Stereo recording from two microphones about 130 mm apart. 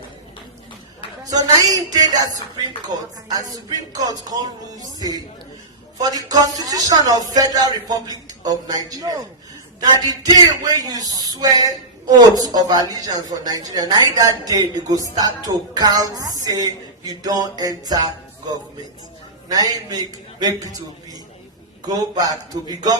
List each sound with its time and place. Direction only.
1.2 s a man's voice: 30° right (ahead or behind)
6.0 s a man's voice: 30° right (ahead or behind)
19.5 s a man's voice: 30° right (ahead or behind)
21.8 s speech: 30° right (ahead or behind)